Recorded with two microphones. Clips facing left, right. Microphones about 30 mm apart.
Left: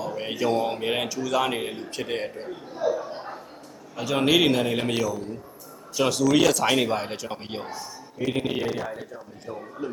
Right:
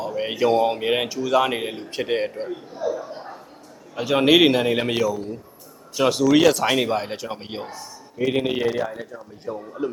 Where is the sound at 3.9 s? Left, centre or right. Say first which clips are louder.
Right 5 dB; centre.